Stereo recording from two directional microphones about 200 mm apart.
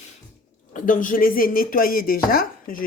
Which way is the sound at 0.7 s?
40° left (ahead or behind).